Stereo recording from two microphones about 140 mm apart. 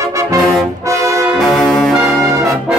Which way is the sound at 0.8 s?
20° right (ahead or behind).